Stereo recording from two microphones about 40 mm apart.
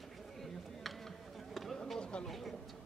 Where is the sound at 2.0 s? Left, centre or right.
Left.